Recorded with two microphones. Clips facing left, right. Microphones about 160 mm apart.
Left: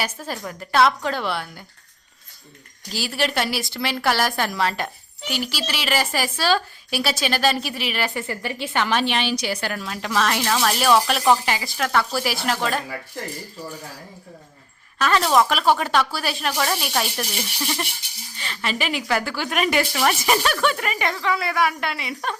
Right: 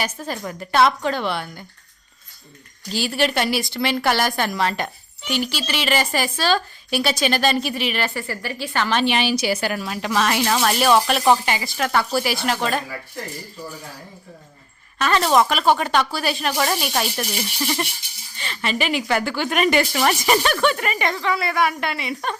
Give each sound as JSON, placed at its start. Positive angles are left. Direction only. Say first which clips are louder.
{"t": 0.0, "sound": "speech", "louder": "right 2 dB", "side_deg": 5}
{"t": 2.9, "sound": "speech", "louder": "right 3 dB", "side_deg": 0}
{"t": 8.1, "sound": "a woman's voice", "louder": "even", "side_deg": 20}
{"t": 9.0, "sound": "a woman's voice", "louder": "right 3 dB", "side_deg": -5}
{"t": 14.9, "sound": "speech", "louder": "right 1 dB", "side_deg": 0}